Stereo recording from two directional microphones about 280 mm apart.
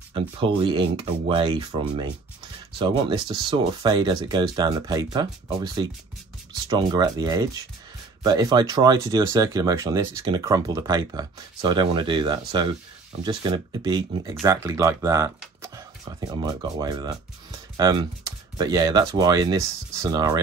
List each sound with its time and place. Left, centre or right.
0.1 s speech: centre